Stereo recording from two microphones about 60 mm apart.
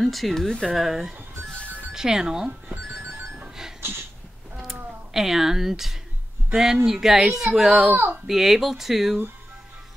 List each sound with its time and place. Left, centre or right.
0.0 s speech: centre
0.7 s speech: centre
2.7 s telephone bell ringing: right
5.1 s speech: centre
7.9 s speech: right
8.3 s speech: centre